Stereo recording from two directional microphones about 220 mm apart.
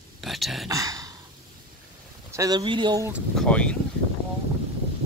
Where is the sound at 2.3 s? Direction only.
15° right (ahead or behind).